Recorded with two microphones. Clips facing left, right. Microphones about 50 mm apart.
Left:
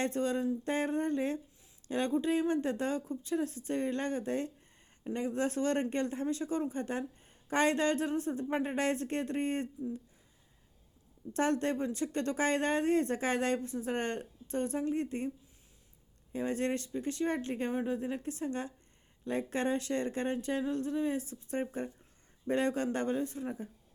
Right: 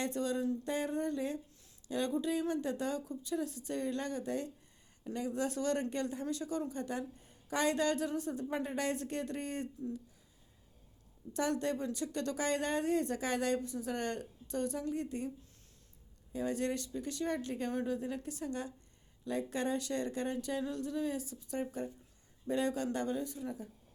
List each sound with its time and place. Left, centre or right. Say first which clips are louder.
0.0 s speech: left 3 dB; left
11.3 s speech: left 3 dB; left
16.3 s speech: left 2 dB; left